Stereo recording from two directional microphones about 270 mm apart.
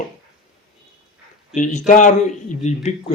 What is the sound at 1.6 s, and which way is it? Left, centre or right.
Speech, left.